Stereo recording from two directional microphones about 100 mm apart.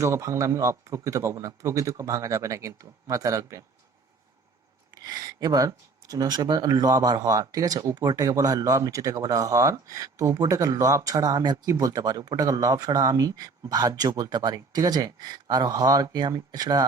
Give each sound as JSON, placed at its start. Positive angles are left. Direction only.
{"t": 0.0, "sound": "speech", "side_deg": -30}
{"t": 5.0, "sound": "speech", "side_deg": -40}